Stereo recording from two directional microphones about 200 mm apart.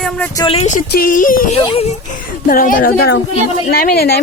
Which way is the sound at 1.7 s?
35° left (ahead or behind).